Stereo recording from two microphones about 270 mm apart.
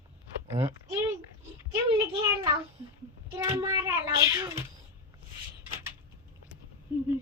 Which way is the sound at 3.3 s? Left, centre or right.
Centre.